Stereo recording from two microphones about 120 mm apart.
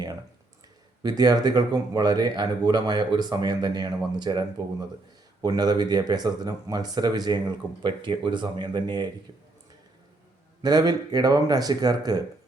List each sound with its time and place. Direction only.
1.0 s speech: 35° right (ahead or behind)
10.6 s speech: 35° right (ahead or behind)